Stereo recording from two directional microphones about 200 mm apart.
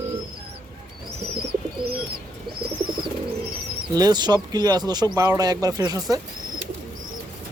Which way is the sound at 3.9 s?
20° right (ahead or behind).